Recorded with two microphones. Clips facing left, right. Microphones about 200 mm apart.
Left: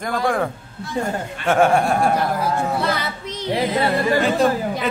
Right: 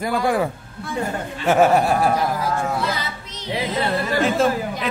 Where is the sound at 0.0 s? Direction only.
5° right (ahead or behind).